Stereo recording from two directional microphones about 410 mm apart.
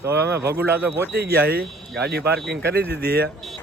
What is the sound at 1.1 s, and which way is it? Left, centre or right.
Speech, right.